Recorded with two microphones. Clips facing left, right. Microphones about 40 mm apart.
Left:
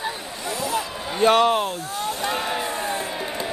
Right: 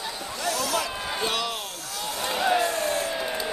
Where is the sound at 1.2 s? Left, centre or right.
Left.